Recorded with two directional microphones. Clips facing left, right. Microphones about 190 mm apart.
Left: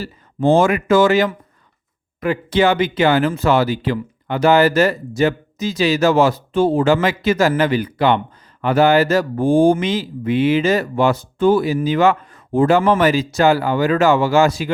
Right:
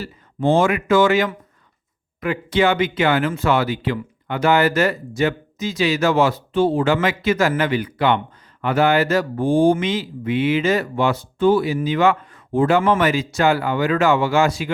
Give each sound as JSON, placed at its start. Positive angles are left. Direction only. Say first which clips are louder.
{"t": 0.0, "sound": "speech", "louder": "left 3 dB", "side_deg": 45}